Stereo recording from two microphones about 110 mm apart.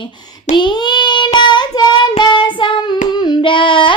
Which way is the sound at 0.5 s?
45° left (ahead or behind).